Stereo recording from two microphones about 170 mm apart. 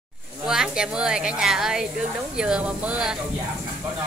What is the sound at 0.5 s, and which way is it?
A woman's voice, 5° right (ahead or behind).